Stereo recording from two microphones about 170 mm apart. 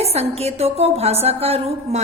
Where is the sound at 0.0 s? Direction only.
35° right (ahead or behind).